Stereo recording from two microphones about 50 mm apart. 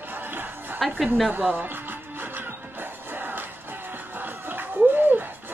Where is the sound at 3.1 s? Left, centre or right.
Right.